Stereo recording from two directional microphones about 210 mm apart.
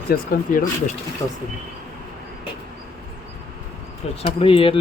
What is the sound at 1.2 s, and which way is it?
Speech, 10° left (ahead or behind).